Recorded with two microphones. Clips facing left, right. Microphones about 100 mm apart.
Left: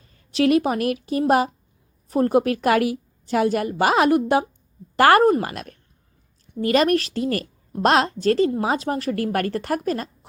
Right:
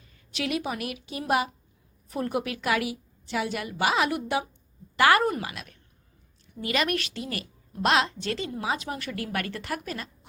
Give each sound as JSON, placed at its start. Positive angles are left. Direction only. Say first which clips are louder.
{"t": 0.0, "sound": "a woman's voice", "louder": "left 13 dB", "side_deg": 35}